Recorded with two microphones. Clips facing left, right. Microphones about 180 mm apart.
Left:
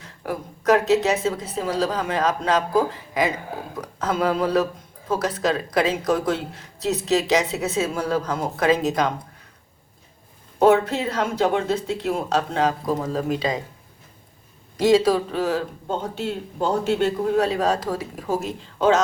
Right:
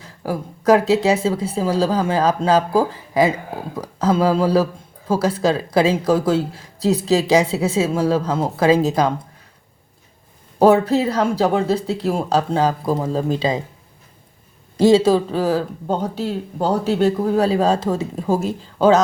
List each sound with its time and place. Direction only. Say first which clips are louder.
0.0 s speech: right 4 dB; 35° right (ahead or behind)
10.6 s speech: right 4 dB; 35° right (ahead or behind)
14.8 s speech: right 4 dB; 30° right (ahead or behind)